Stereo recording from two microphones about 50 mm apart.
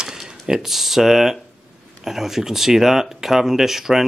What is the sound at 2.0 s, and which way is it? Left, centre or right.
Speech, centre.